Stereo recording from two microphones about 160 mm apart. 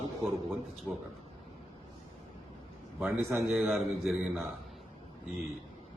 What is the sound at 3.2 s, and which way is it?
Speech, 15° right (ahead or behind).